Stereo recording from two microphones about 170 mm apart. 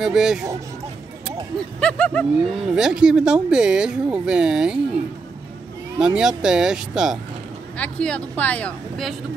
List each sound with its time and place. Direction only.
0.0 s speech: 5° right (ahead or behind)
1.8 s speech: 5° left (ahead or behind)
5.9 s speech: 5° right (ahead or behind)
7.7 s speech: 5° left (ahead or behind)